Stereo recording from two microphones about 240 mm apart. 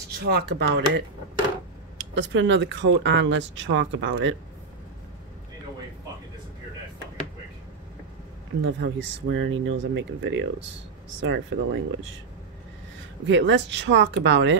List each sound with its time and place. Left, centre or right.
0.3 s speech: right
2.1 s speech: right
8.6 s speech: right
13.3 s speech: right